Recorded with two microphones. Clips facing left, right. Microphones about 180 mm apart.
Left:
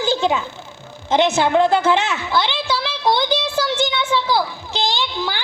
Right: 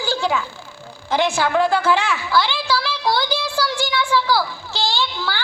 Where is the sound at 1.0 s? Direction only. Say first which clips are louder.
Left 3 dB; 20° left (ahead or behind).